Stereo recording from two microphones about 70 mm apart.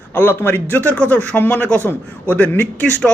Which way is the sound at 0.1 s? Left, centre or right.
Left.